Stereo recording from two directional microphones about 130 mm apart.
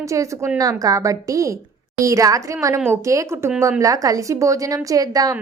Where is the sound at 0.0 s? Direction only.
25° right (ahead or behind).